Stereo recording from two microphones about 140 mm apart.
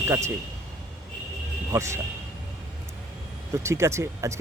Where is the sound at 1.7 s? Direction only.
20° right (ahead or behind).